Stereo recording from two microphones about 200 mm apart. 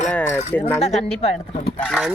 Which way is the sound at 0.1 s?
10° left (ahead or behind).